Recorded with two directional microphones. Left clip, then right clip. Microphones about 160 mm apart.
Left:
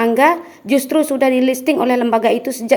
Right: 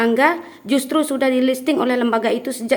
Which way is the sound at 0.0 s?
15° left (ahead or behind).